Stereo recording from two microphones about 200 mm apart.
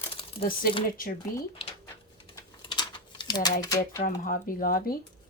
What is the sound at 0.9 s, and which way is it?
Speech, 45° left (ahead or behind).